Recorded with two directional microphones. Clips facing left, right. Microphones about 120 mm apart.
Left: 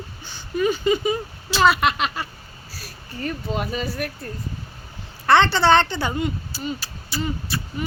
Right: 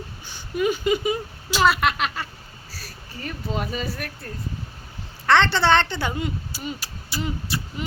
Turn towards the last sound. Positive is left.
turn(degrees=-15)  # may be behind; listen again after turning